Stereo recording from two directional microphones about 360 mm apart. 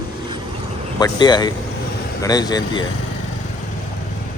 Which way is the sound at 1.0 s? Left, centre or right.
Centre.